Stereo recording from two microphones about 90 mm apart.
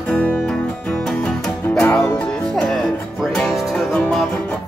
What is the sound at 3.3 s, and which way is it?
Music, 5° left (ahead or behind).